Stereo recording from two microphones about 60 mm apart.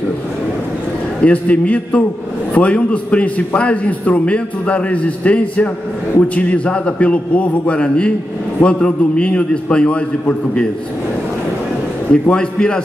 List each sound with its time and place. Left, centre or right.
1.2 s a man's voice: left
12.1 s a man's voice: centre